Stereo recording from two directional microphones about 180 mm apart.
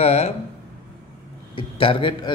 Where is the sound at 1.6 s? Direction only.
30° left (ahead or behind).